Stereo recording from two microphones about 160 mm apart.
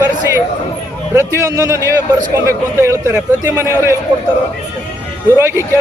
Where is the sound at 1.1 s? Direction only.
20° right (ahead or behind).